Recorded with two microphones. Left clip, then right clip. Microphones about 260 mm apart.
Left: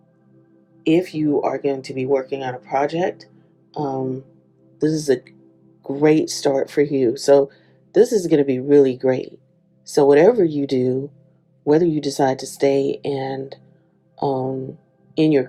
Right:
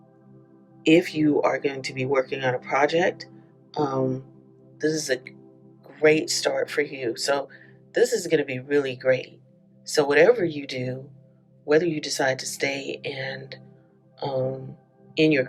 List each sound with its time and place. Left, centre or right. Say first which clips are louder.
0.8 s speech: left 1 dB; centre